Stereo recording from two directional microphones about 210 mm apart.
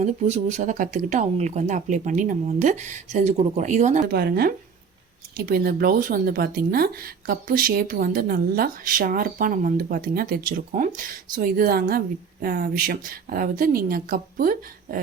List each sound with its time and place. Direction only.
0.0 s speech: 35° right (ahead or behind)
4.1 s speech: 50° right (ahead or behind)